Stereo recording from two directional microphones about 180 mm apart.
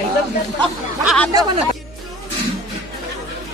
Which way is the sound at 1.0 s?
Centre (ahead or behind).